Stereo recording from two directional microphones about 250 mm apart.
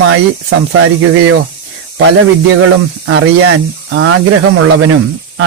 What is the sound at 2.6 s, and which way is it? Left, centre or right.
Speech, right.